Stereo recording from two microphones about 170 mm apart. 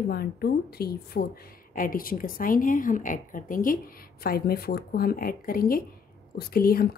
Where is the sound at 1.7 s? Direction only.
55° left (ahead or behind).